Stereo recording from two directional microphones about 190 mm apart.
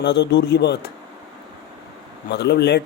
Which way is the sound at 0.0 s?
65° left (ahead or behind).